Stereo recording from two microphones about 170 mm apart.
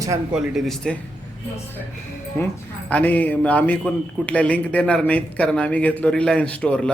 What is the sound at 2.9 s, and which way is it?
A man's voice, 10° left (ahead or behind).